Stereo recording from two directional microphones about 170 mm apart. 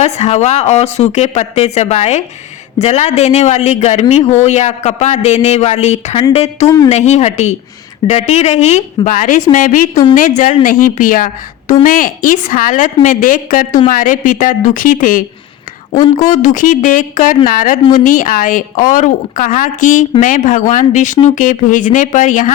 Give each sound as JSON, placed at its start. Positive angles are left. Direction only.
{"t": 0.0, "sound": "a woman's voice", "side_deg": 40}